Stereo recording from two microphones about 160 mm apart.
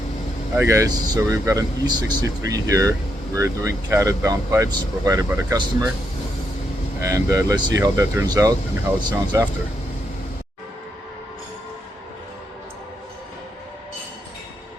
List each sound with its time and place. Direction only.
0.5 s speech: 15° right (ahead or behind)
7.0 s speech: 20° right (ahead or behind)